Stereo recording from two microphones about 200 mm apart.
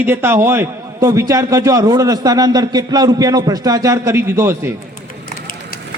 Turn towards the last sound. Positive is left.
turn(degrees=-10)  # may be behind; listen again after turning